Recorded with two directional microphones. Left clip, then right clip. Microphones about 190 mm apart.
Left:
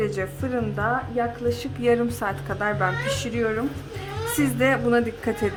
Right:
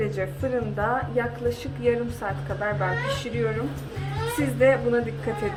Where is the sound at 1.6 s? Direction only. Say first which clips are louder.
Left 4 dB; 40° left (ahead or behind).